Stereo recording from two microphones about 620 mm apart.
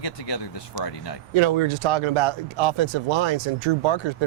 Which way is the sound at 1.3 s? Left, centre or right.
Right.